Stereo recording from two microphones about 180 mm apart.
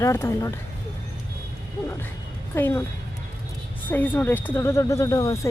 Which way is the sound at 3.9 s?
10° left (ahead or behind).